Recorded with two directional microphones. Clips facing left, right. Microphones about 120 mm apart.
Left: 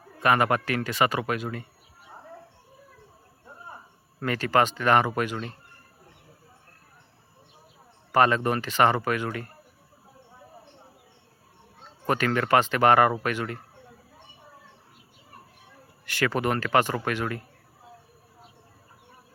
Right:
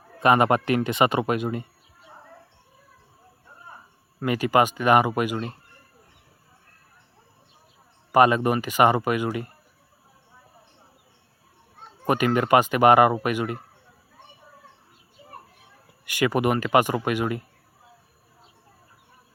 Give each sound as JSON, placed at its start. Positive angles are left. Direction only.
{"t": 0.2, "sound": "speech", "side_deg": -20}
{"t": 4.2, "sound": "speech", "side_deg": -10}
{"t": 8.1, "sound": "speech", "side_deg": -15}
{"t": 12.0, "sound": "speech", "side_deg": -15}
{"t": 16.0, "sound": "speech", "side_deg": -15}